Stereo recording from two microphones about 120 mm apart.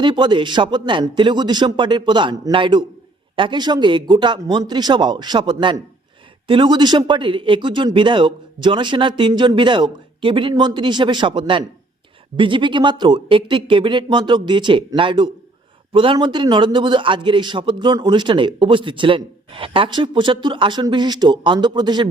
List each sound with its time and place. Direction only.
0.0 s a man's voice: 40° right (ahead or behind)
10.5 s a man's voice: 35° right (ahead or behind)